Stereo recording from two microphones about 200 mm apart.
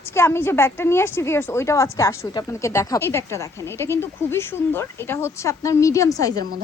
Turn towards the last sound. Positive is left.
turn(degrees=-50)  # may be behind; listen again after turning